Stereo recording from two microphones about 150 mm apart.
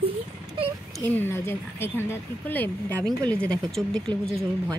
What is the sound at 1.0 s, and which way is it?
A woman's voice, 15° left (ahead or behind).